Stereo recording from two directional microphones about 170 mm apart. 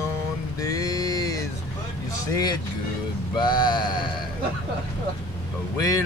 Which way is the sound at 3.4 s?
25° left (ahead or behind).